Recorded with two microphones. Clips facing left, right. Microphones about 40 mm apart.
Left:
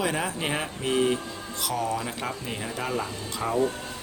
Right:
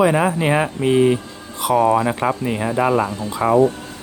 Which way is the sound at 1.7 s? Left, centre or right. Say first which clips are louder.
Right 14 dB; right.